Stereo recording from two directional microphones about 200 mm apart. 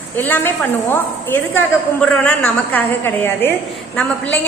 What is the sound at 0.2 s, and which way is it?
A woman's voice, 10° left (ahead or behind).